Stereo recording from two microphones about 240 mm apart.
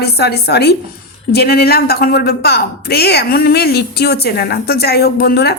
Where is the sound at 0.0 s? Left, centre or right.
Left.